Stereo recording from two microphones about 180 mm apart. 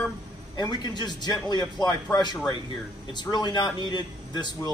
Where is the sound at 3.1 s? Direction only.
25° left (ahead or behind).